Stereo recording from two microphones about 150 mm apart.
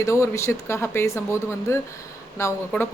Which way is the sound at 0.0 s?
20° left (ahead or behind).